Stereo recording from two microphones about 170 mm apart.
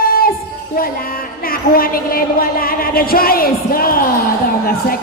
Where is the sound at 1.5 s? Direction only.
60° left (ahead or behind).